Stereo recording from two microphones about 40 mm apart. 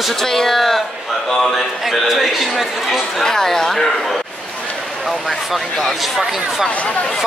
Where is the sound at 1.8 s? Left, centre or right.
Centre.